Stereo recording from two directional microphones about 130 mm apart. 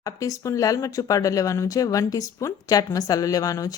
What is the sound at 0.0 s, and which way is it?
Speech, 25° left (ahead or behind).